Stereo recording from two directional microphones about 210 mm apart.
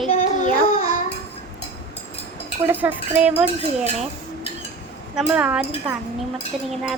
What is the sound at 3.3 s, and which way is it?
Speech, 30° right (ahead or behind).